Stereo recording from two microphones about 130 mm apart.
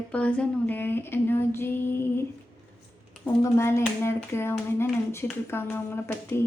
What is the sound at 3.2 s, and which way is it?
Speech, 20° left (ahead or behind).